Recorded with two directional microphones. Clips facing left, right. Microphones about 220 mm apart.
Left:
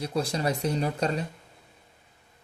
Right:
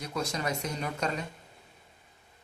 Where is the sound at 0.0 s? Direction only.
30° left (ahead or behind).